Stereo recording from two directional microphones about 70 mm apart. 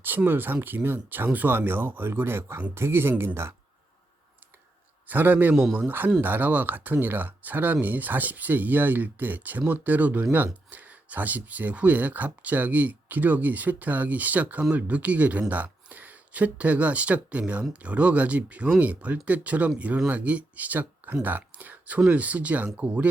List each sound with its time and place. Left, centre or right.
0.0 s speech: right
5.0 s speech: right